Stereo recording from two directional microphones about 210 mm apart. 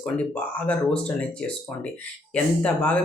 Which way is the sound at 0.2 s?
5° left (ahead or behind).